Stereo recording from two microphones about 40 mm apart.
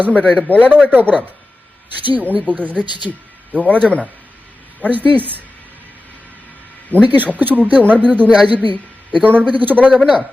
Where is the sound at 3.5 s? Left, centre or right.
Right.